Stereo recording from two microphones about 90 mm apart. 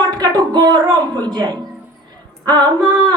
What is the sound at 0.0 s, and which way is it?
A woman's voice, 50° right (ahead or behind).